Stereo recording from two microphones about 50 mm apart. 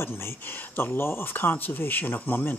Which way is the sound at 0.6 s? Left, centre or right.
Left.